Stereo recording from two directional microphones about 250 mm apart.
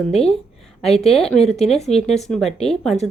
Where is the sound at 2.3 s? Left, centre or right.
Centre.